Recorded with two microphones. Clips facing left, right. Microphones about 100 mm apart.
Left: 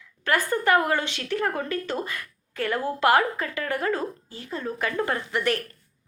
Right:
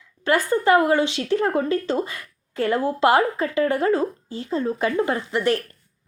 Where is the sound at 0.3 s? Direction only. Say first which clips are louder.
Right 4 dB; 20° right (ahead or behind).